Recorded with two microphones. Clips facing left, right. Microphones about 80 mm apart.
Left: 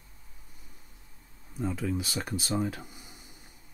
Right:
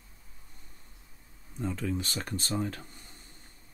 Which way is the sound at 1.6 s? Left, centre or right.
Centre.